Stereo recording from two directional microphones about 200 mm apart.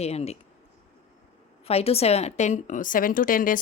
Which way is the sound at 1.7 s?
30° left (ahead or behind).